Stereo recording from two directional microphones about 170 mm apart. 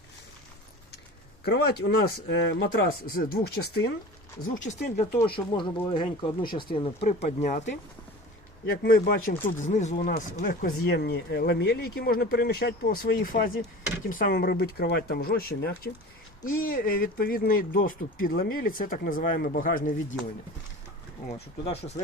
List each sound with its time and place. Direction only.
1.5 s speech: 75° left (ahead or behind)
4.4 s speech: 55° left (ahead or behind)
5.2 s speech: 30° left (ahead or behind)
7.3 s speech: 50° left (ahead or behind)
8.8 s speech: 65° left (ahead or behind); by 10.2 s 50° left (ahead or behind)
10.4 s speech: 65° left (ahead or behind)
21.3 s speech: 35° left (ahead or behind)